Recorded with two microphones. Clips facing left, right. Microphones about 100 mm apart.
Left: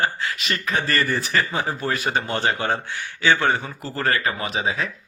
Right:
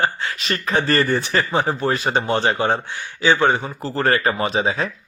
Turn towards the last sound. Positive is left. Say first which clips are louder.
# right 5 dB
turn(degrees=-35)  # may be behind; listen again after turning